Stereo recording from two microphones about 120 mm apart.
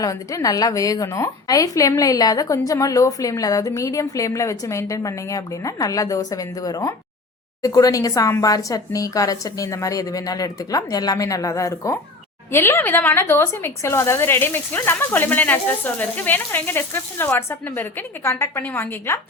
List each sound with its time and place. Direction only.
0.0 s a woman's voice: 25° left (ahead or behind)